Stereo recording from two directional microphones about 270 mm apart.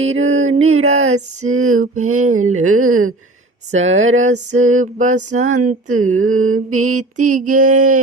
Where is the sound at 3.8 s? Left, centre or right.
Right.